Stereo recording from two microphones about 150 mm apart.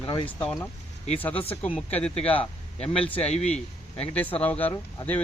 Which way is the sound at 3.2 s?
45° left (ahead or behind).